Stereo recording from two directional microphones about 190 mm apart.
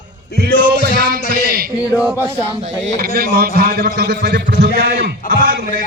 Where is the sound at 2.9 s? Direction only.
50° right (ahead or behind).